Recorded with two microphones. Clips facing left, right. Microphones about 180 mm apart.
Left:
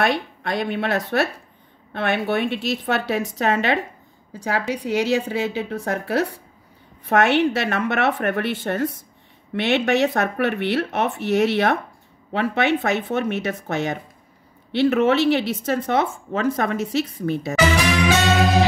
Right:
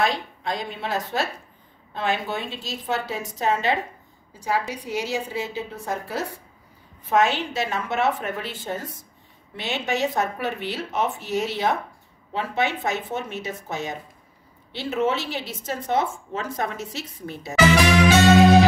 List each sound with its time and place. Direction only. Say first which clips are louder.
0.0 s speech: left 3 dB; 65° left (ahead or behind)
18.3 s music: right 7 dB; centre (ahead or behind)